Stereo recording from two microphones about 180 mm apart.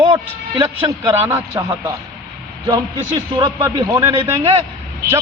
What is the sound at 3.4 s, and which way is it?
Speech, 25° right (ahead or behind).